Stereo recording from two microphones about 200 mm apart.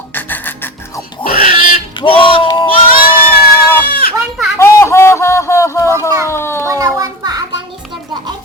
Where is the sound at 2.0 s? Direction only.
25° left (ahead or behind).